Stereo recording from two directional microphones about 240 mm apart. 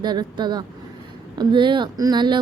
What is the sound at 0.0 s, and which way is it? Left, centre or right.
Speech, centre.